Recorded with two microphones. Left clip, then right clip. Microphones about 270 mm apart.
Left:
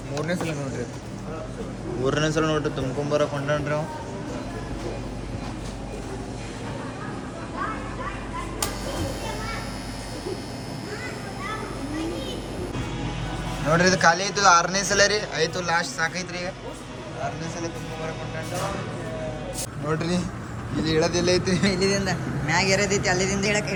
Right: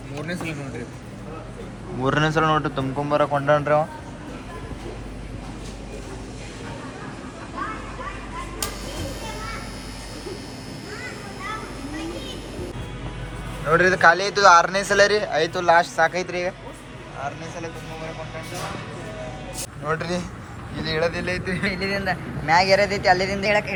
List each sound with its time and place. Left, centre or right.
2.0 s speech: centre
7.6 s a sound: centre
8.6 s children playing: centre
11.4 s children playing: centre
13.7 s a man's voice: centre
19.9 s speech: centre